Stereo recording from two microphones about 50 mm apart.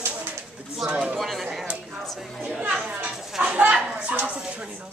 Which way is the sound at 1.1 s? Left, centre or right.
Centre.